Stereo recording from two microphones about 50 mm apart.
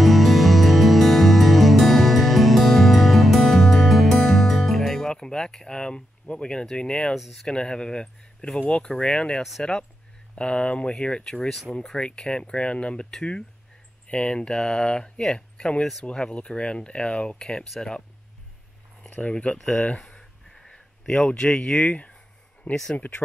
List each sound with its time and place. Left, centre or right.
0.0 s music: centre
5.1 s speech: centre
20.2 s a sound: centre
21.1 s speech: centre
22.9 s speech: left